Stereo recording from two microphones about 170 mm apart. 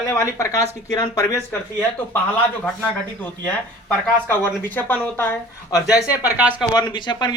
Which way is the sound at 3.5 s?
10° left (ahead or behind).